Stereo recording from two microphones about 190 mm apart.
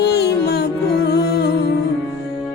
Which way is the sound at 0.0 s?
60° left (ahead or behind).